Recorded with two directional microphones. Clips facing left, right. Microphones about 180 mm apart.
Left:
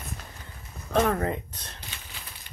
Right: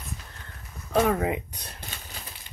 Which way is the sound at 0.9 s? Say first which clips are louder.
Right 1 dB; 5° right (ahead or behind).